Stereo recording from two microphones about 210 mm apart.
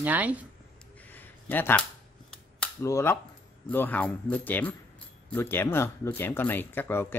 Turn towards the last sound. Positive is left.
turn(degrees=10)  # may be behind; listen again after turning